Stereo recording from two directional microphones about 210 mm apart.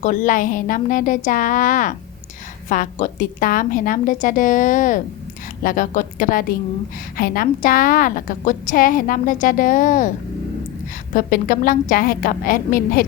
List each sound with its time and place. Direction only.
0.0 s a woman's voice: 40° left (ahead or behind)
11.1 s a woman's voice: 40° left (ahead or behind)